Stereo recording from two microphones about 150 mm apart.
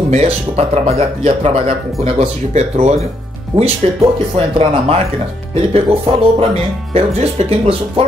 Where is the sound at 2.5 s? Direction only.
45° right (ahead or behind).